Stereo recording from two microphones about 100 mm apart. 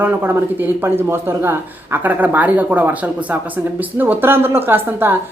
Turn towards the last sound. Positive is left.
turn(degrees=-20)  # may be behind; listen again after turning